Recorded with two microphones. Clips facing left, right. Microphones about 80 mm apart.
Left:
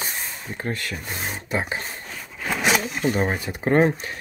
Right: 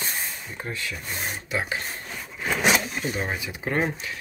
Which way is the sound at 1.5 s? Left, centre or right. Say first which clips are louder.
Left 2 dB; left.